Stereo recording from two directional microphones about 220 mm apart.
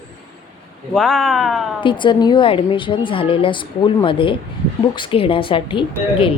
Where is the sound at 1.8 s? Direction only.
20° left (ahead or behind).